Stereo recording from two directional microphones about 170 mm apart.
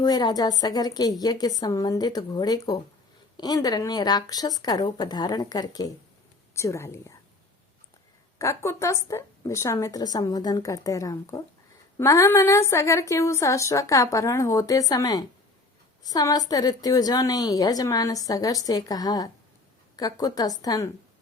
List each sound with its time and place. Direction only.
0.0 s a woman's voice: 25° left (ahead or behind)
8.4 s a woman's voice: 15° left (ahead or behind)